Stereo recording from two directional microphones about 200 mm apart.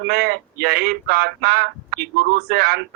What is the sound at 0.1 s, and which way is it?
Speech, 50° right (ahead or behind).